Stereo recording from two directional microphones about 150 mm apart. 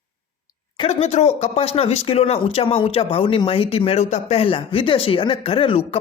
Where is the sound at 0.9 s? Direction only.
45° left (ahead or behind).